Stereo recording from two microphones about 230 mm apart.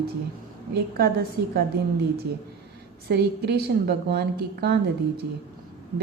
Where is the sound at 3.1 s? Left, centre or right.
Right.